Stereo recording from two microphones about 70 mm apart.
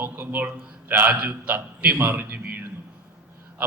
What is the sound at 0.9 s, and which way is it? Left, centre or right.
A man's voice, right.